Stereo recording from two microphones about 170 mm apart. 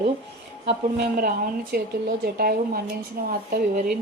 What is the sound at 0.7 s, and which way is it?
A woman's voice, 65° right (ahead or behind).